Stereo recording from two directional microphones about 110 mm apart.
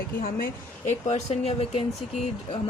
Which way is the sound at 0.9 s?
90° left.